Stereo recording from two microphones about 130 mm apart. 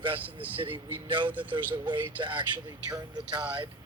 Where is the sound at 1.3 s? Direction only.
10° right (ahead or behind).